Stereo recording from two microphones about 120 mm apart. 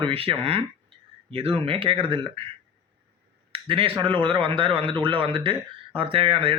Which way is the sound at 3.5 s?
50° right (ahead or behind).